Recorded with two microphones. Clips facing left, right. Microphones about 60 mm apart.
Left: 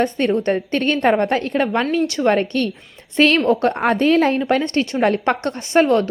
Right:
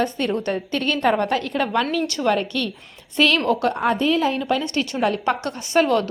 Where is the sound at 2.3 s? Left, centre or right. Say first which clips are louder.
Left 4 dB; left.